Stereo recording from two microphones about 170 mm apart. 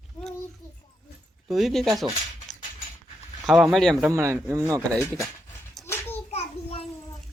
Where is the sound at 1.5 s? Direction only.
Centre (ahead or behind).